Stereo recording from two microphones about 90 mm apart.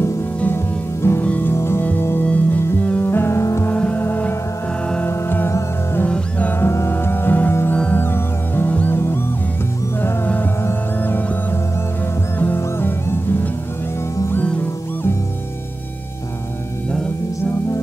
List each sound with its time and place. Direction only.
1.2 s music: 15° left (ahead or behind)
1.5 s music: 30° left (ahead or behind)
3.7 s music: 15° left (ahead or behind)
6.7 s music: 30° left (ahead or behind)
8.0 s music: 25° left (ahead or behind)